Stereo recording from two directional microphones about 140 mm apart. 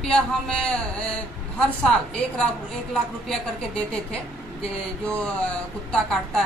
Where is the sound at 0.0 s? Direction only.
5° left (ahead or behind).